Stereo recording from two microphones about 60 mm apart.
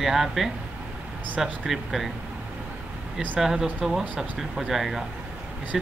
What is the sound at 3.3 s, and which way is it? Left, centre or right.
Speech, centre.